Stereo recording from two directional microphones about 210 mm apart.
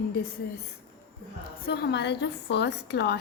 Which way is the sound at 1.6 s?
45° left (ahead or behind).